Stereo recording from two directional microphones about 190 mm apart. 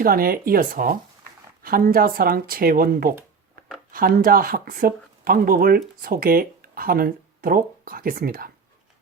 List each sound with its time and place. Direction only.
0.0 s speech: 50° right (ahead or behind)